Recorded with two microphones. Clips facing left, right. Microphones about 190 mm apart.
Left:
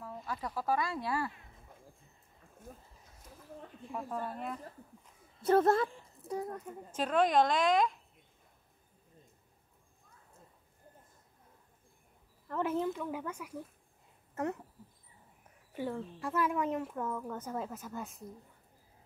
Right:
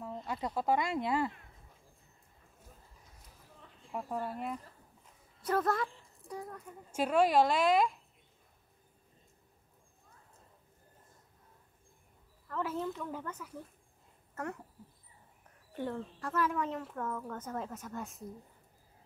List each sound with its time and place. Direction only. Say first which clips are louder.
0.0 s speech: right 2 dB; 25° right (ahead or behind)
2.7 s a sound: left 10 dB; 55° left (ahead or behind)
3.9 s a woman's voice: right 1 dB; 10° right (ahead or behind)
5.4 s a woman's voice: left 5 dB; 25° left (ahead or behind)
6.9 s a woman's voice: right 1 dB; 10° right (ahead or behind)
12.4 s a woman's voice: left 3 dB; 20° left (ahead or behind)
15.7 s a woman's voice: even; 5° left (ahead or behind)